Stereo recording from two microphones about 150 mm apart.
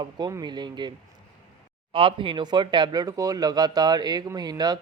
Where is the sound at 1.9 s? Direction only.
35° right (ahead or behind).